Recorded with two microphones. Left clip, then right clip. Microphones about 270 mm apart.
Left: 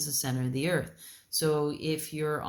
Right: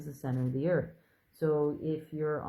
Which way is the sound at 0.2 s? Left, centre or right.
Left.